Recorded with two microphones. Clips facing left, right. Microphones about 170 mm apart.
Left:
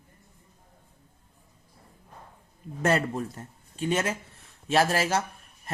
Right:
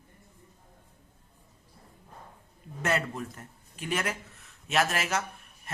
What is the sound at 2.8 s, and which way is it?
Speech, 35° left (ahead or behind).